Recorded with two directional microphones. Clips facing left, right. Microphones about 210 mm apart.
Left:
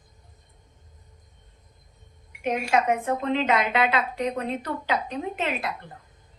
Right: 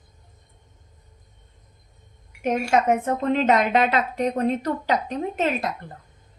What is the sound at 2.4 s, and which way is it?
A woman's voice, 45° right (ahead or behind).